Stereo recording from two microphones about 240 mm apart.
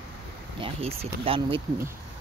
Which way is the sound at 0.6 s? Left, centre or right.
Right.